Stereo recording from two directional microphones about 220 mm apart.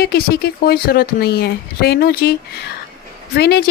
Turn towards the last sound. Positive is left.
turn(degrees=45)  # may be behind; listen again after turning